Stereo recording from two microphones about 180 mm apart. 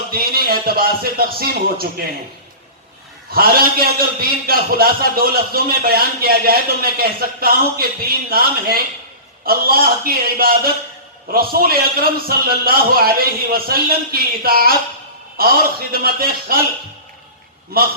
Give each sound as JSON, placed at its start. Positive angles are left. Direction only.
{"t": 0.1, "sound": "a man's voice", "side_deg": -55}
{"t": 3.3, "sound": "a man's voice", "side_deg": -55}